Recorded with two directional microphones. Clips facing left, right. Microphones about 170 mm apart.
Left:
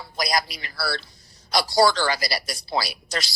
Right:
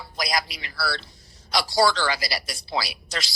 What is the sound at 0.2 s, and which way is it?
A woman's voice, 40° left (ahead or behind).